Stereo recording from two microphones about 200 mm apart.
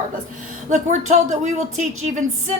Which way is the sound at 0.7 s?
35° right (ahead or behind).